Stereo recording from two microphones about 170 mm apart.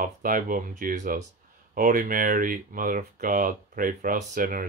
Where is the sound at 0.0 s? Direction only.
55° right (ahead or behind).